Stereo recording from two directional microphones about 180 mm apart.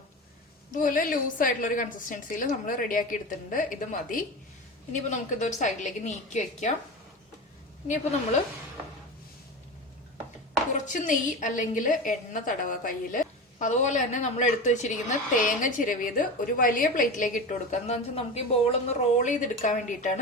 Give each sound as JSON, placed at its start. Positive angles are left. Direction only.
{"t": 0.7, "sound": "a woman's voice", "side_deg": 50}
{"t": 10.8, "sound": "a woman's voice", "side_deg": 45}
{"t": 19.2, "sound": "a woman's voice", "side_deg": 45}